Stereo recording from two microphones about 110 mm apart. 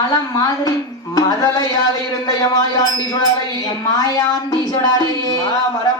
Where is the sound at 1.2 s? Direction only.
35° left (ahead or behind).